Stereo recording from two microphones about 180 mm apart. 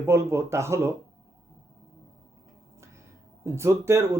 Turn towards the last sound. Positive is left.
turn(degrees=-15)  # may be behind; listen again after turning